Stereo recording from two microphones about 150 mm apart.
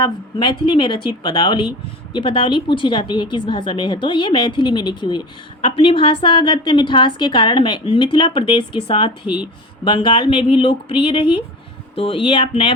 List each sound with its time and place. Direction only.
0.0 s a woman's voice: 30° left (ahead or behind)